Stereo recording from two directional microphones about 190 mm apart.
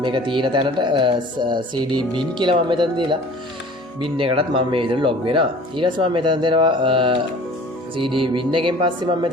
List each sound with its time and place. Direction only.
0.0 s speech: 25° right (ahead or behind)